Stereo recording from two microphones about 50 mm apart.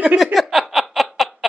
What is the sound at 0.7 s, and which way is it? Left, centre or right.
Snicker, centre.